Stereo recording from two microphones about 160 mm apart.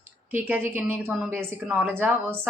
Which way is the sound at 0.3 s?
15° right (ahead or behind).